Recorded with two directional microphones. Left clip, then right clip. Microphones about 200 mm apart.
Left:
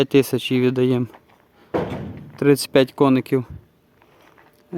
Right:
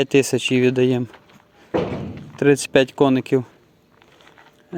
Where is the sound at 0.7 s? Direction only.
20° left (ahead or behind).